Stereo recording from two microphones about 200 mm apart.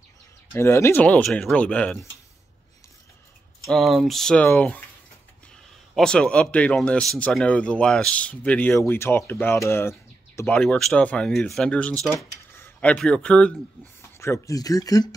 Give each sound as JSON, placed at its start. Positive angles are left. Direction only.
{"t": 0.6, "sound": "speech", "side_deg": 15}
{"t": 3.6, "sound": "speech", "side_deg": 0}
{"t": 5.9, "sound": "speech", "side_deg": 5}